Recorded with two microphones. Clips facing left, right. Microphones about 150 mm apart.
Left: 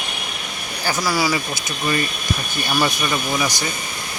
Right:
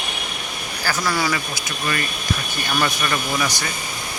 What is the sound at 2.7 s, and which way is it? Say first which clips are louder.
Speech: left 1 dB; 10° left (ahead or behind).